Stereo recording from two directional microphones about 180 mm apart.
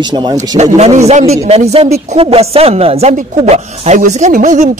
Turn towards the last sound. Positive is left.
turn(degrees=-45)  # may be behind; listen again after turning